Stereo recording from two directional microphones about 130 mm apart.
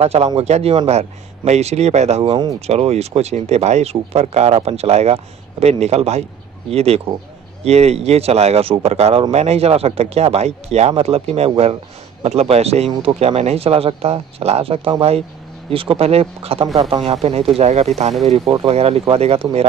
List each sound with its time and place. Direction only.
0.0 s speech: 55° right (ahead or behind)